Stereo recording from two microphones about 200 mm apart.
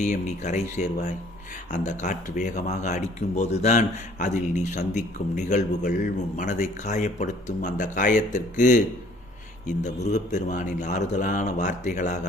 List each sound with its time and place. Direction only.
0.0 s a man's voice: 35° left (ahead or behind)